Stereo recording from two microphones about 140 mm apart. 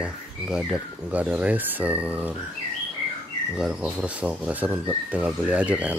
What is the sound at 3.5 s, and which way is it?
Speech, 5° right (ahead or behind).